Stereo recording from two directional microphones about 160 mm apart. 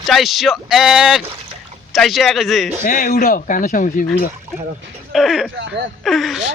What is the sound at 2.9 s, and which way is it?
A man's voice, 50° left (ahead or behind).